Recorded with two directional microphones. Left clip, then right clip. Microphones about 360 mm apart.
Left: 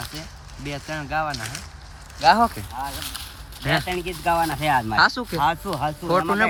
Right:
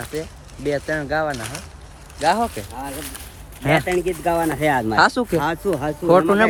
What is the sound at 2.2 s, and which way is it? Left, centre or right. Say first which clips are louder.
Speech: left 2 dB; centre.